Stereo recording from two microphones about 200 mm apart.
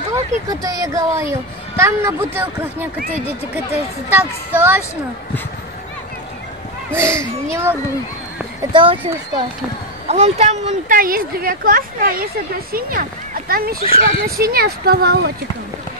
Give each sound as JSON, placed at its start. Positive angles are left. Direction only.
{"t": 0.1, "sound": "speech", "side_deg": -15}
{"t": 4.1, "sound": "speech", "side_deg": -10}
{"t": 7.0, "sound": "speech", "side_deg": -15}
{"t": 10.0, "sound": "speech", "side_deg": -30}